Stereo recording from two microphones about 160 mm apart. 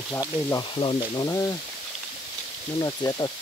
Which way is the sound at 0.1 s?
20° left (ahead or behind).